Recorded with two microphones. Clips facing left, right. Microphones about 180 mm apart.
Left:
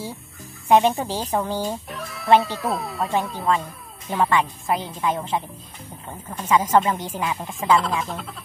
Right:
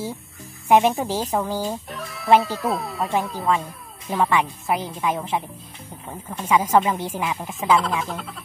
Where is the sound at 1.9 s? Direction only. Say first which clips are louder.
Even; centre (ahead or behind).